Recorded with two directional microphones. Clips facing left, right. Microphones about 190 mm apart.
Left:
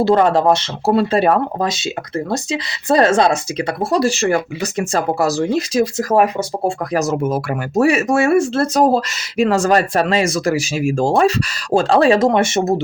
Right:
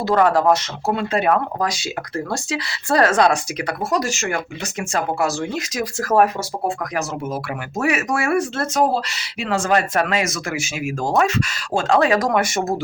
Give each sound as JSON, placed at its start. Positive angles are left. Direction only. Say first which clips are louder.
{"t": 0.0, "sound": "speech", "louder": "left 3 dB", "side_deg": 25}
{"t": 6.0, "sound": "speech", "louder": "right 1 dB", "side_deg": 15}
{"t": 6.7, "sound": "speech", "louder": "left 7 dB", "side_deg": 40}
{"t": 7.8, "sound": "speech", "louder": "left 7 dB", "side_deg": 30}